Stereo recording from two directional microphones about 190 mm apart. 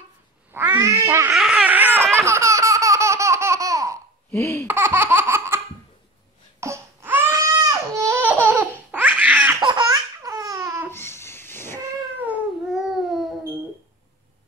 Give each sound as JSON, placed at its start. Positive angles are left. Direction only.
{"t": 0.5, "sound": "speech", "side_deg": -10}
{"t": 1.3, "sound": "baby cry", "side_deg": -5}
{"t": 2.1, "sound": "laughter", "side_deg": -15}
{"t": 4.3, "sound": "speech", "side_deg": 15}
{"t": 4.6, "sound": "laughter", "side_deg": -10}
{"t": 6.6, "sound": "baby cry", "side_deg": -15}
{"t": 9.6, "sound": "laughter", "side_deg": -20}
{"t": 10.9, "sound": "a sound", "side_deg": 10}
{"t": 12.2, "sound": "cat", "side_deg": -5}